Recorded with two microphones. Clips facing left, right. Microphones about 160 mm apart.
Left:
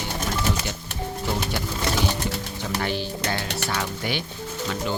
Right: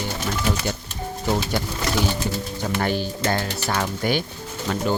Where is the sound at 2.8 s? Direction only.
45° right (ahead or behind).